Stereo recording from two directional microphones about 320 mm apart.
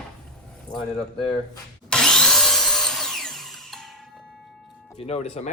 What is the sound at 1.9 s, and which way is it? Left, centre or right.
Wood, centre.